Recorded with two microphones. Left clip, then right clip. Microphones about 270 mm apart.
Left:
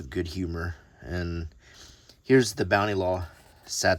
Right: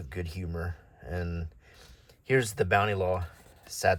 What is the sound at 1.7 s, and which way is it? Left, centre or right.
Speech, left.